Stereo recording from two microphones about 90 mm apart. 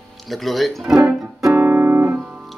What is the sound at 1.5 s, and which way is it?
Music, 20° right (ahead or behind).